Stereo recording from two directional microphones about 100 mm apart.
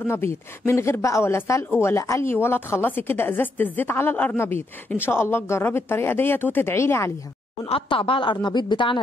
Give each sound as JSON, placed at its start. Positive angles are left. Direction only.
{"t": 0.0, "sound": "a woman's voice", "side_deg": 25}
{"t": 7.6, "sound": "speech", "side_deg": 70}